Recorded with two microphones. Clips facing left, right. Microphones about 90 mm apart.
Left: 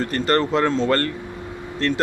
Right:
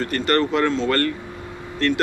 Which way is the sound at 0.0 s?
30° left (ahead or behind).